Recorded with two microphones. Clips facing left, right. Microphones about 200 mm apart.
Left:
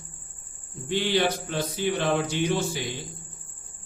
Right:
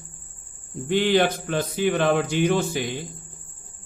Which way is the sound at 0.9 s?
50° right (ahead or behind).